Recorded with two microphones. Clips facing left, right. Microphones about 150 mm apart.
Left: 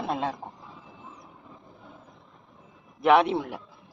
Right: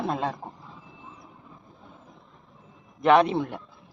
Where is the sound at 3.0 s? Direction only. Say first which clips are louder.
Right 1 dB; 5° left (ahead or behind).